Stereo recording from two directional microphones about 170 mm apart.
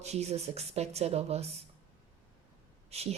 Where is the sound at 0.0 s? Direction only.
40° right (ahead or behind).